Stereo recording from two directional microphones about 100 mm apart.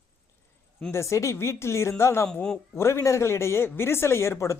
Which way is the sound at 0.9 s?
30° left (ahead or behind).